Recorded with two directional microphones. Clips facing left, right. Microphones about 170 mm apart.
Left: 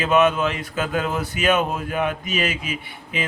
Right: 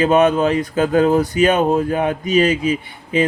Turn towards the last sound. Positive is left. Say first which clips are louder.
# right 10 dB
turn(degrees=-40)  # may be behind; listen again after turning